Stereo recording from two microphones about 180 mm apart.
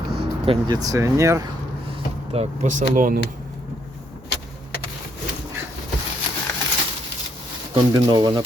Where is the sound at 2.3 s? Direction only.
40° right (ahead or behind).